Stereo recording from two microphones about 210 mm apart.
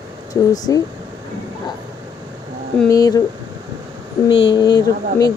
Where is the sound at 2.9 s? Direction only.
15° left (ahead or behind).